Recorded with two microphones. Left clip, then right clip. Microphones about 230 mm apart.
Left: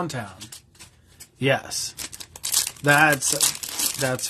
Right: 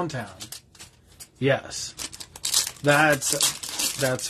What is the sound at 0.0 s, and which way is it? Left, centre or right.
Speech, centre.